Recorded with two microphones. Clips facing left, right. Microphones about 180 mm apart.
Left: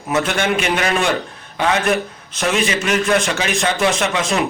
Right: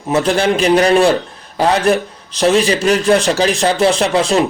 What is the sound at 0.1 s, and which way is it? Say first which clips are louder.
A man's voice: right 5 dB; 35° right (ahead or behind).